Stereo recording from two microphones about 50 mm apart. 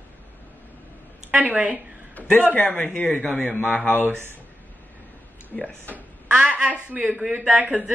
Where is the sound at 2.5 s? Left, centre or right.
Left.